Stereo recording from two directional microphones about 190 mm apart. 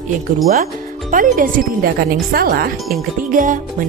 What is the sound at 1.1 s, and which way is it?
Speech, 45° right (ahead or behind).